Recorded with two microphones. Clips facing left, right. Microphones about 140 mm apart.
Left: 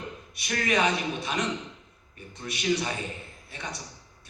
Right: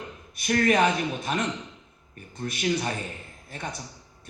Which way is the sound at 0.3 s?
50° right (ahead or behind).